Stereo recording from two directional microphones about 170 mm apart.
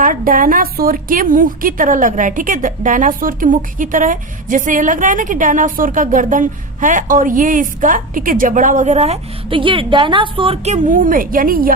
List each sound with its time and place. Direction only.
0.0 s a woman's voice: 55° right (ahead or behind)